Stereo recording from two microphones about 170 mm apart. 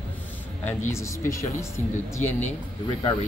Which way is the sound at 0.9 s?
15° left (ahead or behind).